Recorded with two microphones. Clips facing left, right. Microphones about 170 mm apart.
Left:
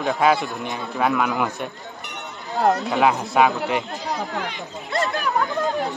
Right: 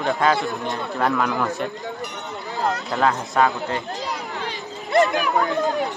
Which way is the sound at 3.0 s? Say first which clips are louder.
Left 1 dB; 15° left (ahead or behind).